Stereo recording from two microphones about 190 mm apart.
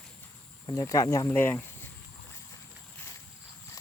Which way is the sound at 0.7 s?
15° left (ahead or behind).